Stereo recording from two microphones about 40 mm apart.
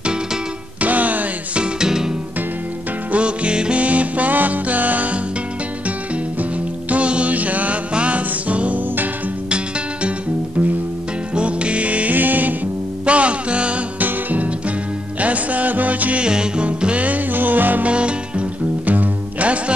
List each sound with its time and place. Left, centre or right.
0.7 s music: right
1.6 s music: centre
3.1 s music: right
3.8 s music: right
6.9 s music: right
11.3 s music: right
12.2 s music: right
13.0 s music: right
13.9 s music: right
16.2 s music: right
17.3 s music: right
17.8 s music: right